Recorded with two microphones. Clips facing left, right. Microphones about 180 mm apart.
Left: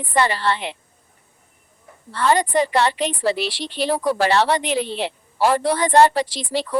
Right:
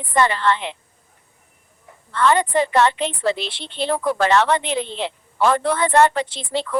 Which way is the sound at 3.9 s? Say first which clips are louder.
Right 1 dB; 35° left (ahead or behind).